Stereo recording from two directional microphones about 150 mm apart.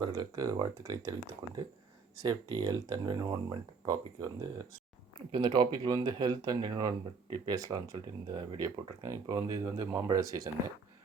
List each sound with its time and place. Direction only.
0.0 s speech: 30° right (ahead or behind)
2.1 s speech: 25° right (ahead or behind)